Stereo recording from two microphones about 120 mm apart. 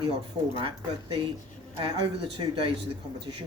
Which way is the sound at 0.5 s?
45° right (ahead or behind).